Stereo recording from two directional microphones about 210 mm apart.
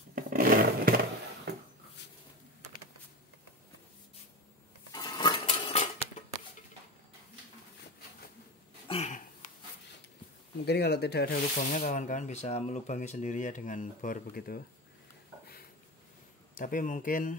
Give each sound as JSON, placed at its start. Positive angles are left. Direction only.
{"t": 0.1, "sound": "a sound", "side_deg": -40}
{"t": 4.9, "sound": "dishes", "side_deg": 20}
{"t": 8.8, "sound": "a sound", "side_deg": 30}
{"t": 10.6, "sound": "speech", "side_deg": 50}
{"t": 11.7, "sound": "speech", "side_deg": 35}
{"t": 16.5, "sound": "speech", "side_deg": 40}